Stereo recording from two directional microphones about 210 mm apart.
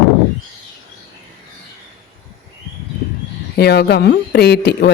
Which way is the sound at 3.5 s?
50° left (ahead or behind).